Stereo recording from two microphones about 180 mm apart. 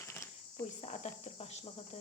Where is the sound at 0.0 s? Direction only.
15° left (ahead or behind).